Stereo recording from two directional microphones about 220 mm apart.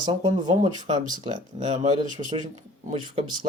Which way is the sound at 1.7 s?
35° right (ahead or behind).